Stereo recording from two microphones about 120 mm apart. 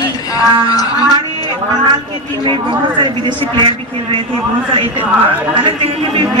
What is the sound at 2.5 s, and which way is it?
A man's voice, 40° right (ahead or behind).